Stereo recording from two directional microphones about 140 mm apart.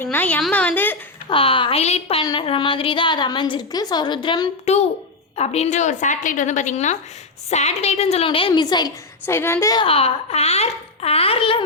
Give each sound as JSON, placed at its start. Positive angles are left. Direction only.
{"t": 0.0, "sound": "a woman's voice", "side_deg": 10}
{"t": 1.3, "sound": "a woman's voice", "side_deg": 40}
{"t": 2.2, "sound": "a woman's voice", "side_deg": 35}
{"t": 4.6, "sound": "a child's voice", "side_deg": 50}
{"t": 9.2, "sound": "a woman's voice", "side_deg": 15}
{"t": 9.7, "sound": "a child's voice", "side_deg": 40}